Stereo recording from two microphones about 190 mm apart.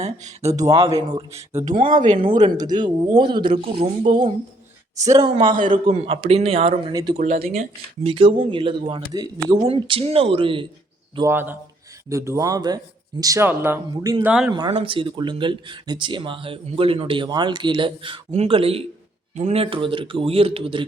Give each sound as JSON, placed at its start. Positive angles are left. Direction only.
{"t": 0.0, "sound": "speech", "side_deg": -35}
{"t": 0.5, "sound": "speech", "side_deg": -20}
{"t": 1.9, "sound": "speech", "side_deg": -40}
{"t": 2.6, "sound": "speech", "side_deg": -20}
{"t": 4.9, "sound": "speech", "side_deg": -15}
{"t": 7.2, "sound": "speech", "side_deg": -40}
{"t": 11.3, "sound": "speech", "side_deg": -10}
{"t": 14.3, "sound": "speech", "side_deg": -5}
{"t": 14.5, "sound": "speech", "side_deg": -25}